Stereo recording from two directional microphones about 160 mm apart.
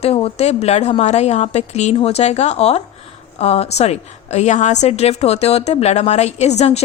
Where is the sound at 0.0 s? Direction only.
35° left (ahead or behind).